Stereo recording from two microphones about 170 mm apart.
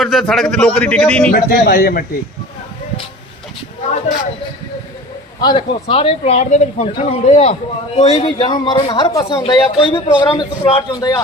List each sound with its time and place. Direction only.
0.0 s speech: centre (ahead or behind)
1.3 s speech: 60° left (ahead or behind)
5.4 s speech: 25° left (ahead or behind)
8.4 s speech: 25° left (ahead or behind)